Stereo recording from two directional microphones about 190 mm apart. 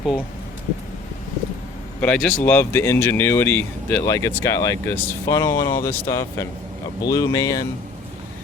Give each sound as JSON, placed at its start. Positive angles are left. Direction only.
{"t": 2.0, "sound": "speech", "side_deg": 5}